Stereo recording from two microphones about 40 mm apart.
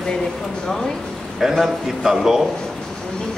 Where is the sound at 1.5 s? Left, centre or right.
Centre.